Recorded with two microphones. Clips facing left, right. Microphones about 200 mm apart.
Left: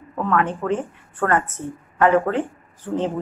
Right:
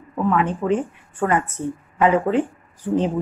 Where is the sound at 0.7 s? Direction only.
15° right (ahead or behind).